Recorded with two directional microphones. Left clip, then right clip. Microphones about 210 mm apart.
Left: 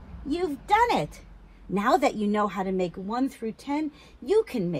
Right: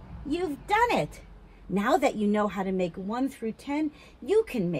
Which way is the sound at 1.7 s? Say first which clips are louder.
Left 2 dB; 15° left (ahead or behind).